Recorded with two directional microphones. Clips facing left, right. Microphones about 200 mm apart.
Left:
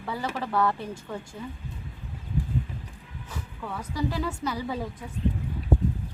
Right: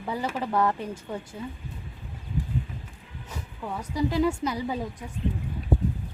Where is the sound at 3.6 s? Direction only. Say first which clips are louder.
Right 3 dB; 15° right (ahead or behind).